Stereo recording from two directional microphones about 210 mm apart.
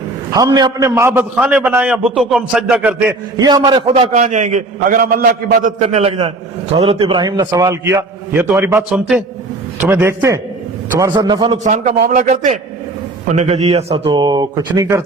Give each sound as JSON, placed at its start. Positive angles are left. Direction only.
{"t": 0.3, "sound": "a man's voice", "side_deg": -15}
{"t": 4.1, "sound": "a man's voice", "side_deg": -35}
{"t": 11.6, "sound": "a man's voice", "side_deg": -35}